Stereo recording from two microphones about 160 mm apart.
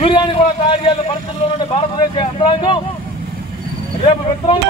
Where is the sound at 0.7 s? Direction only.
30° left (ahead or behind).